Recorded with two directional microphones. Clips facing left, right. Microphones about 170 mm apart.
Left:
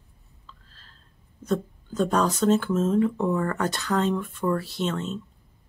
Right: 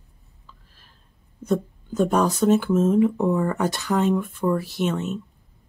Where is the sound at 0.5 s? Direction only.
15° right (ahead or behind).